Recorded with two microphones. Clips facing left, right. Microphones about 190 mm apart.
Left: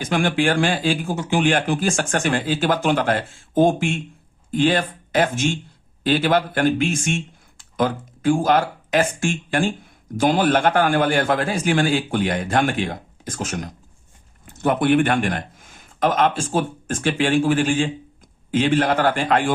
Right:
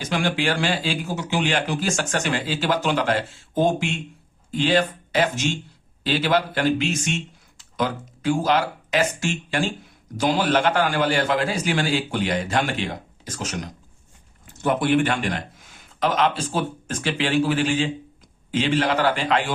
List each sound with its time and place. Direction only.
0.0 s speech: 50° left (ahead or behind)